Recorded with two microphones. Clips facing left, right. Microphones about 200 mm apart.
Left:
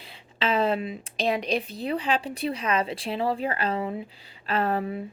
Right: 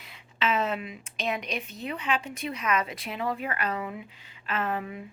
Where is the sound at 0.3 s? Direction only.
30° left (ahead or behind).